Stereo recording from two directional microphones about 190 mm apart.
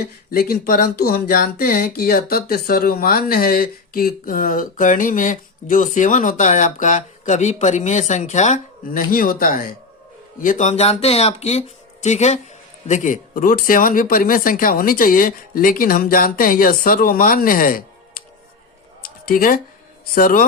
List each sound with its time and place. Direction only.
0.3 s speech: 50° left (ahead or behind)
19.3 s speech: 45° left (ahead or behind)